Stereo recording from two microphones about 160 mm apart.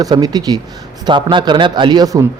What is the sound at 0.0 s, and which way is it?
Speech, 25° right (ahead or behind).